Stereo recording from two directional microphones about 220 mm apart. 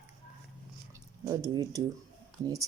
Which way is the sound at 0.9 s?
15° right (ahead or behind).